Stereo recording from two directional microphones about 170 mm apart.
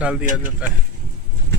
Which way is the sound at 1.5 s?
90° right.